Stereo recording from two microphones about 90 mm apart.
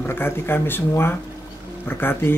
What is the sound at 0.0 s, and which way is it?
Speech, 25° left (ahead or behind).